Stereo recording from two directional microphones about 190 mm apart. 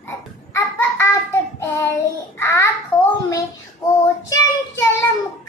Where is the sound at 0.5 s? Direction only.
10° left (ahead or behind).